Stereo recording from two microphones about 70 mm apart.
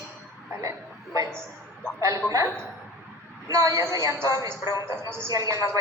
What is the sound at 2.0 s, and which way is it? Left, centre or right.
Speech, right.